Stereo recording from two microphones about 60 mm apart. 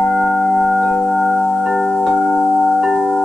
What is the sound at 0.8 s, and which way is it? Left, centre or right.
Singing bowl, centre.